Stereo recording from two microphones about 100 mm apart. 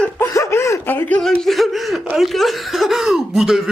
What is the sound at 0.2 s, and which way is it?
Chuckle, 30° left (ahead or behind).